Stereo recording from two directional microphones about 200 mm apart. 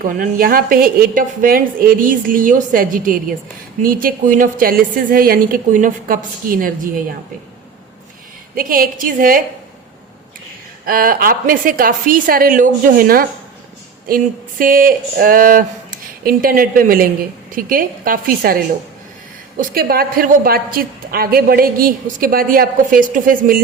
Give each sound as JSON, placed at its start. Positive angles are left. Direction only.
{"t": 0.0, "sound": "a woman's voice", "side_deg": -45}
{"t": 8.5, "sound": "a woman's voice", "side_deg": -45}
{"t": 10.8, "sound": "a woman's voice", "side_deg": -45}
{"t": 14.6, "sound": "a woman's voice", "side_deg": -45}